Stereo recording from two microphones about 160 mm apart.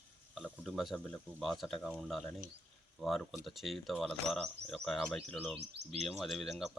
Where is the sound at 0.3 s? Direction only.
Centre (ahead or behind).